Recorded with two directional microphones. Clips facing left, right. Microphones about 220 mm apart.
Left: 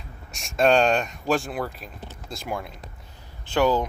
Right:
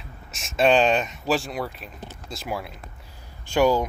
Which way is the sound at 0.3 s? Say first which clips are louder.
Even; centre (ahead or behind).